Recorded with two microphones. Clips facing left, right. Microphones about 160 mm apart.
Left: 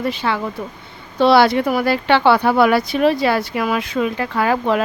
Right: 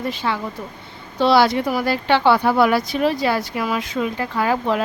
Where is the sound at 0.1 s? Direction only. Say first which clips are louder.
Left 3 dB; 70° left (ahead or behind).